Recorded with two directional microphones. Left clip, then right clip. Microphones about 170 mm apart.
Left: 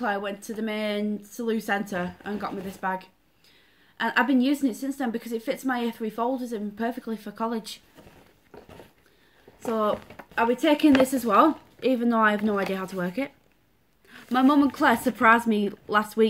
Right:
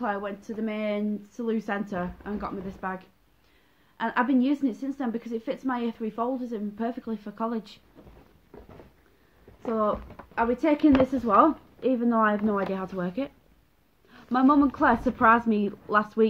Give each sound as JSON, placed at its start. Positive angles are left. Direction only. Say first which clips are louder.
{"t": 0.0, "sound": "a woman's voice", "louder": "left 2 dB", "side_deg": 20}
{"t": 9.7, "sound": "speech", "louder": "left 1 dB", "side_deg": 15}